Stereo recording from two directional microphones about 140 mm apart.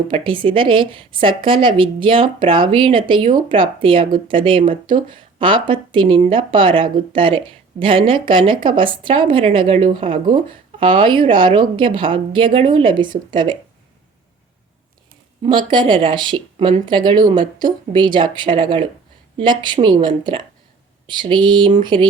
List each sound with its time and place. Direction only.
0.1 s a woman's voice: 35° right (ahead or behind)
15.7 s a woman's voice: 35° right (ahead or behind)